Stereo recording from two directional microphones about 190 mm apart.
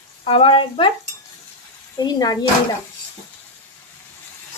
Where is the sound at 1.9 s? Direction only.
20° left (ahead or behind).